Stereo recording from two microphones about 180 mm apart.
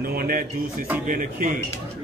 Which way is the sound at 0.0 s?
55° right (ahead or behind).